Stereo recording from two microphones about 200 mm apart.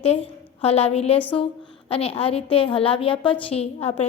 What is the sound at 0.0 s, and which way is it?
A woman's voice, 30° left (ahead or behind).